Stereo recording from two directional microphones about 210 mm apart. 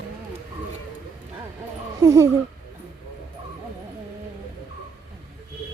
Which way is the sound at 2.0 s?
15° right (ahead or behind).